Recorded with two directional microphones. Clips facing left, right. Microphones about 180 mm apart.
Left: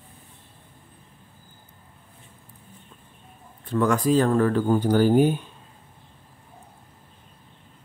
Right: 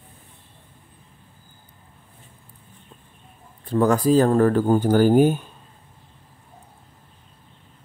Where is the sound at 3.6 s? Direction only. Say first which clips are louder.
Right 3 dB; 35° right (ahead or behind).